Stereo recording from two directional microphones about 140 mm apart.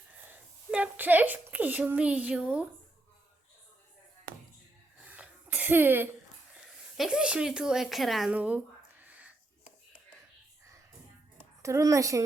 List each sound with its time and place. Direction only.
0.3 s a woman's voice: 10° right (ahead or behind)
5.0 s cough: 10° right (ahead or behind)
6.5 s a sound: centre (ahead or behind)
11.6 s a woman's voice: 20° right (ahead or behind)